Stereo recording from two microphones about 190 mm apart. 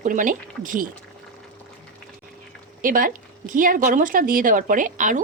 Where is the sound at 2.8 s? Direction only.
45° right (ahead or behind).